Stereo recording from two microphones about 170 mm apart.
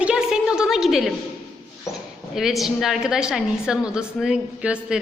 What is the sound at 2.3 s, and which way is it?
A woman's voice, centre (ahead or behind).